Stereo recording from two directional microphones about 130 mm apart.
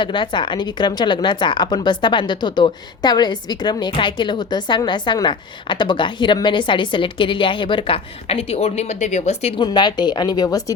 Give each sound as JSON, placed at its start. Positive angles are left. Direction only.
{"t": 0.0, "sound": "a woman's voice", "side_deg": 40}
{"t": 9.6, "sound": "a woman's voice", "side_deg": 35}